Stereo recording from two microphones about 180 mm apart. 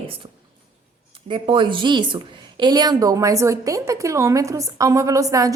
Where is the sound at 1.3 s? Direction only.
25° right (ahead or behind).